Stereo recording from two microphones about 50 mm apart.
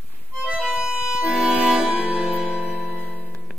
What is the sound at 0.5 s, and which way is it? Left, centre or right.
Accordion, centre.